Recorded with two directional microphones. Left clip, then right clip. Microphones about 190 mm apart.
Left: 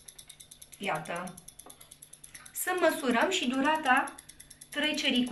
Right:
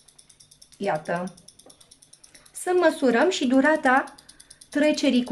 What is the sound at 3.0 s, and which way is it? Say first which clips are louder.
Speech: right 7 dB; 65° right (ahead or behind).